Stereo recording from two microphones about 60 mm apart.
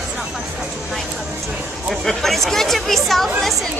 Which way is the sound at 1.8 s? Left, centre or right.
Centre.